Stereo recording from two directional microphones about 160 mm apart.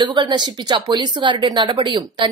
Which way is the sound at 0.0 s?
30° right (ahead or behind).